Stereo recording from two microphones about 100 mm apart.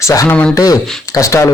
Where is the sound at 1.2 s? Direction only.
35° left (ahead or behind).